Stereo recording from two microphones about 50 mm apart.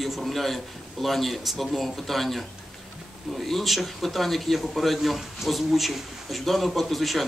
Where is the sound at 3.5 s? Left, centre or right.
Centre.